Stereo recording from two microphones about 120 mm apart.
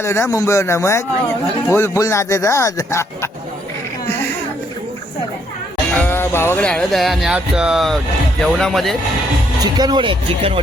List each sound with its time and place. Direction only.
0.0 s speech: 25° left (ahead or behind)
4.1 s a sound: 15° left (ahead or behind)
6.0 s music: 20° left (ahead or behind)
6.7 s speech: 5° left (ahead or behind)
9.6 s speech: 35° right (ahead or behind)